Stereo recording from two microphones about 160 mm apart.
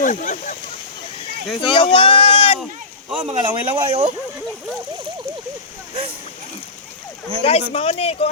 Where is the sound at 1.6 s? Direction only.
30° left (ahead or behind).